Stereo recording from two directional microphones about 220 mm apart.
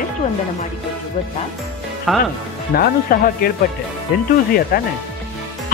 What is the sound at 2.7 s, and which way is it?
Speech, 45° left (ahead or behind).